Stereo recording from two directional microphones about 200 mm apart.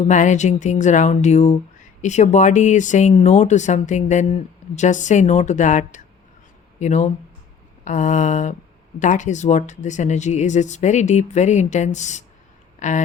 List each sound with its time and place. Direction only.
0.0 s speech: 35° left (ahead or behind)